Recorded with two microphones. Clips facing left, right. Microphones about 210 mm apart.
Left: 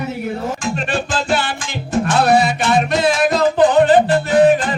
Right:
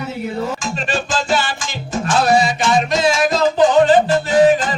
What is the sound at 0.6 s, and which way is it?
Music, 60° left (ahead or behind).